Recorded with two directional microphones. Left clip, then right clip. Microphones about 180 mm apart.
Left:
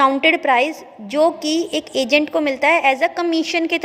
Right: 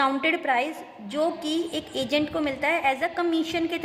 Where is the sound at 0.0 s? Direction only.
30° left (ahead or behind).